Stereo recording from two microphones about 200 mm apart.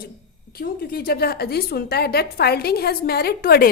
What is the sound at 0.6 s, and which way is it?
A woman's voice, 45° left (ahead or behind).